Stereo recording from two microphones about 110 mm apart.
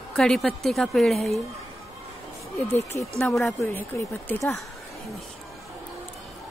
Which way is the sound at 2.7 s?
25° left (ahead or behind).